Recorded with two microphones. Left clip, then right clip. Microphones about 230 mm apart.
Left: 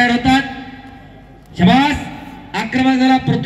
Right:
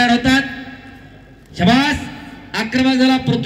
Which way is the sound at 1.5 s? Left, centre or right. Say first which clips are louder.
Left 2 dB; right.